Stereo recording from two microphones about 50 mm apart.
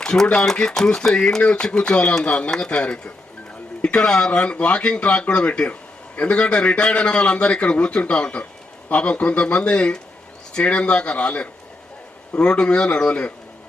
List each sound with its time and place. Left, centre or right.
0.0 s a man's voice: centre